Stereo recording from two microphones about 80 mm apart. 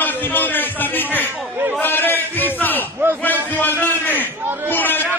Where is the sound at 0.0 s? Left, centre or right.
Left.